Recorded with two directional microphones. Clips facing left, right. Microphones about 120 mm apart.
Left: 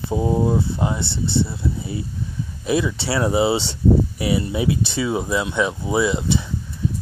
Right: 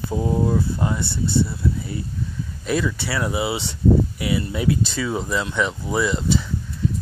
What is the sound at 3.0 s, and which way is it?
Speech, 30° left (ahead or behind).